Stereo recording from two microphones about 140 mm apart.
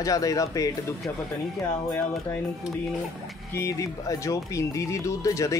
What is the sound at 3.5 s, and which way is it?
Speech, 20° left (ahead or behind).